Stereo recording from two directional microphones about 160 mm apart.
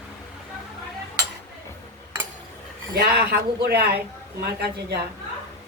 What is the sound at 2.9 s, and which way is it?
A woman's voice, 75° right (ahead or behind).